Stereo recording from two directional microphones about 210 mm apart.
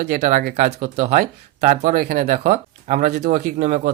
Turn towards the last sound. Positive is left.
turn(degrees=-35)  # may be behind; listen again after turning